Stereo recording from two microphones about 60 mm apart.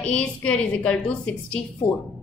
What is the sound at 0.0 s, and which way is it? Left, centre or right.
A woman's voice, centre.